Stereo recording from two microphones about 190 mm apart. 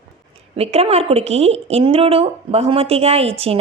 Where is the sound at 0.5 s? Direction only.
30° right (ahead or behind).